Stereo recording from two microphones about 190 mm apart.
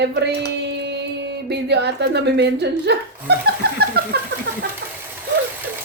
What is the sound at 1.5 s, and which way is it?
A woman's voice, 60° right (ahead or behind).